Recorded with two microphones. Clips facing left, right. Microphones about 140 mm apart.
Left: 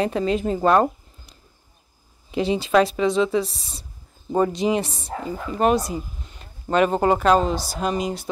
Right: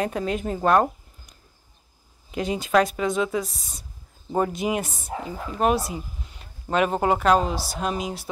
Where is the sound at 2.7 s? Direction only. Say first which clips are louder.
Left 2 dB; centre (ahead or behind).